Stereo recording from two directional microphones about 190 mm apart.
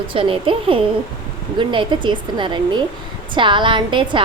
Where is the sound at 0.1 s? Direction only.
25° right (ahead or behind).